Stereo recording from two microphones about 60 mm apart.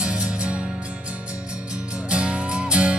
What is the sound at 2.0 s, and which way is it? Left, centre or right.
Music, centre.